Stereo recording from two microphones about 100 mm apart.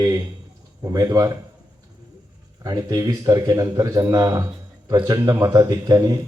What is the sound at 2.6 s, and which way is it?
A man's voice, 35° right (ahead or behind).